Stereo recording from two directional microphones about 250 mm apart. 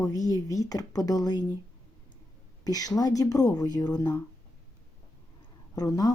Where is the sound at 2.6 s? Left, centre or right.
Centre.